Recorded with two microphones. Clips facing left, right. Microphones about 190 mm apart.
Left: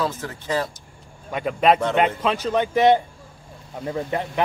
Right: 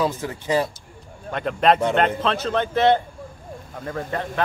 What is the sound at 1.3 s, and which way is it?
Speech, 5° left (ahead or behind).